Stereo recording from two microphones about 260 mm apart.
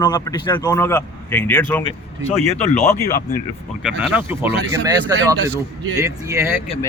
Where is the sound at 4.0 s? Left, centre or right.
Centre.